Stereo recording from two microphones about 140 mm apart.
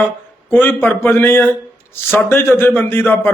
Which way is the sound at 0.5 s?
15° left (ahead or behind).